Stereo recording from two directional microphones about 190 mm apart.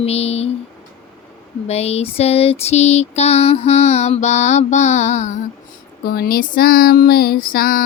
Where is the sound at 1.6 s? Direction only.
35° left (ahead or behind).